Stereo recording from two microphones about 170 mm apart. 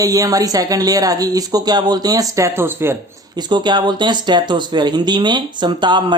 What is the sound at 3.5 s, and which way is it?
Speech, 25° right (ahead or behind).